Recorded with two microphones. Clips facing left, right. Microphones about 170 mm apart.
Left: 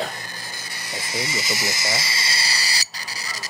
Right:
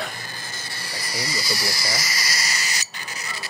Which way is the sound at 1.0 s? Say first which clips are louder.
Left 2 dB; 25° left (ahead or behind).